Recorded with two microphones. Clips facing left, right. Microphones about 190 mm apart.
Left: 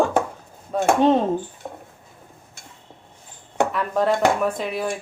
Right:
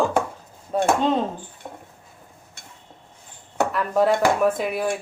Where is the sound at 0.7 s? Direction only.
5° right (ahead or behind).